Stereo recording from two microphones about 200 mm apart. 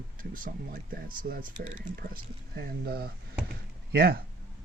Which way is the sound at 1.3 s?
60° right (ahead or behind).